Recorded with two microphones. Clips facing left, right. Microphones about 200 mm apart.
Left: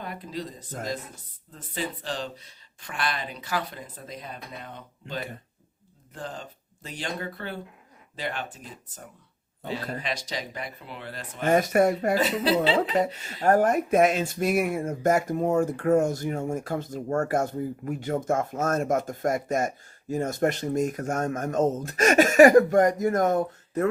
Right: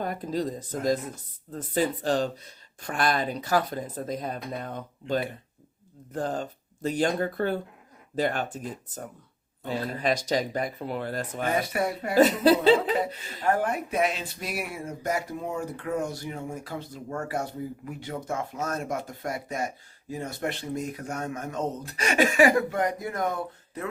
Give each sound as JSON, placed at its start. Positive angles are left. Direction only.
{"t": 0.0, "sound": "speech", "side_deg": -45}
{"t": 11.4, "sound": "speech", "side_deg": 45}
{"t": 12.1, "sound": "speech", "side_deg": -45}
{"t": 13.4, "sound": "speech", "side_deg": 45}